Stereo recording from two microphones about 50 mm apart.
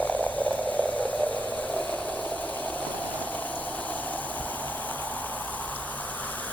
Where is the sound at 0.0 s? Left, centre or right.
Left.